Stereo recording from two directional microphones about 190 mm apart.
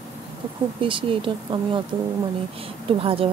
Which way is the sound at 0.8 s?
25° right (ahead or behind).